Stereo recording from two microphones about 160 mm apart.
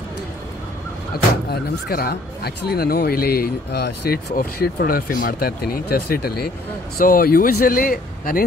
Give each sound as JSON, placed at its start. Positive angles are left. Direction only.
{"t": 1.5, "sound": "speech", "side_deg": 70}